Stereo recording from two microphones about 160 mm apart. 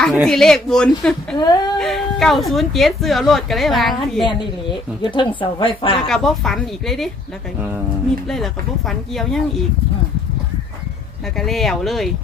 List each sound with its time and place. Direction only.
0.3 s a woman's voice: 5° left (ahead or behind)
1.4 s a sound: 25° left (ahead or behind)
1.8 s a woman's voice: centre (ahead or behind)
5.0 s a woman's voice: 30° left (ahead or behind)
6.1 s a woman's voice: centre (ahead or behind)
8.9 s a woman's voice: centre (ahead or behind)
11.3 s a woman's voice: centre (ahead or behind)